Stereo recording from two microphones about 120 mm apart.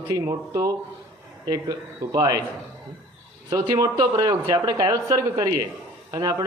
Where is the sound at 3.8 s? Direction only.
30° right (ahead or behind).